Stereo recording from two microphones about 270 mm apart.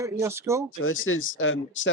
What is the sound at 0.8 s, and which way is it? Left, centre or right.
Speech, left.